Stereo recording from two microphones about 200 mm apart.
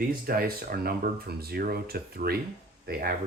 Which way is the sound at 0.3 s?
50° right (ahead or behind).